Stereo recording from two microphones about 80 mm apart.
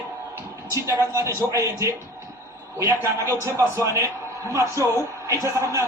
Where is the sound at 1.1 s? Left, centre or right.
Right.